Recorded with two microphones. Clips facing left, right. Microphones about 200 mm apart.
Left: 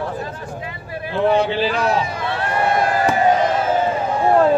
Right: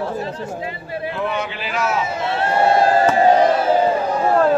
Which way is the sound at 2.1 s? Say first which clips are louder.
Right 3 dB; 25° right (ahead or behind).